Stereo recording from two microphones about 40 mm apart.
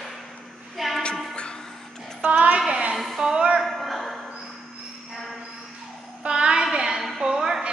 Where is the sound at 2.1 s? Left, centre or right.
Right.